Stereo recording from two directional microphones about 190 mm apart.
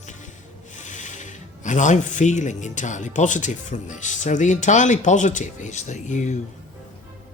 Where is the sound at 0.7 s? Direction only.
40° left (ahead or behind).